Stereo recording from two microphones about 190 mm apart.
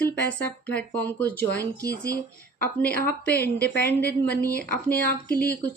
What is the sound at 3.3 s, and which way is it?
Speech, 55° left (ahead or behind).